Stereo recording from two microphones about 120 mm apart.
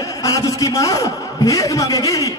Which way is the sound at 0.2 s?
25° left (ahead or behind).